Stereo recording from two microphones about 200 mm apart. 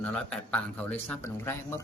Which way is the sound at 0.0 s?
5° left (ahead or behind).